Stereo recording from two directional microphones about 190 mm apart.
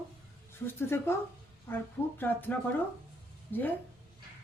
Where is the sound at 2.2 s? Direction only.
10° left (ahead or behind).